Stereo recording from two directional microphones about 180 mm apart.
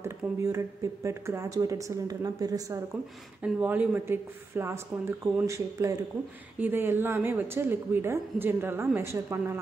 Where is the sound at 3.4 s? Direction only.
5° right (ahead or behind).